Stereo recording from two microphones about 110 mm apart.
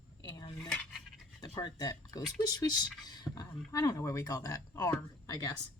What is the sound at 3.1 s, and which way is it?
Beatboxing, 40° left (ahead or behind).